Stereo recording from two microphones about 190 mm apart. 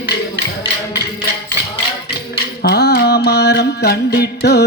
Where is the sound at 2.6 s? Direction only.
55° left (ahead or behind).